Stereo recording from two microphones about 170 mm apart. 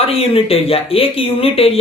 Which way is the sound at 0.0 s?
35° left (ahead or behind).